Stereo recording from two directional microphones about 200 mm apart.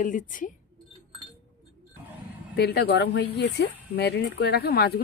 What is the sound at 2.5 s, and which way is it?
Speech, 55° left (ahead or behind).